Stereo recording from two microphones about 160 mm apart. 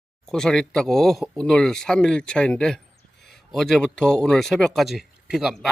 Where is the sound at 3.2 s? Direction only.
Centre (ahead or behind).